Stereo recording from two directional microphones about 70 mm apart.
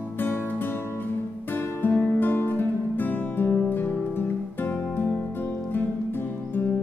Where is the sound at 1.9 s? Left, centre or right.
Centre.